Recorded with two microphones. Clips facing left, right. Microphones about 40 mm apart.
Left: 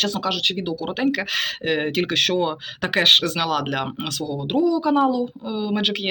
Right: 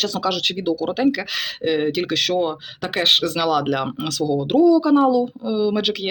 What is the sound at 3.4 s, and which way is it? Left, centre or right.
Speech, left.